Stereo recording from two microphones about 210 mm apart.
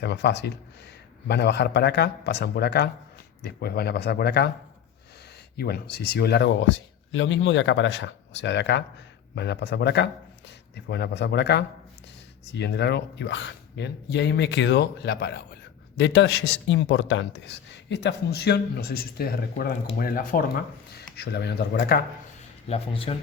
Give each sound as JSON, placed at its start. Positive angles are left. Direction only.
{"t": 0.0, "sound": "a man's voice", "side_deg": 55}
{"t": 5.5, "sound": "a man's voice", "side_deg": 50}
{"t": 22.7, "sound": "speech", "side_deg": 25}